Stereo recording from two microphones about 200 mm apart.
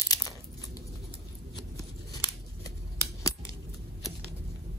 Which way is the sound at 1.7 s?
20° left (ahead or behind).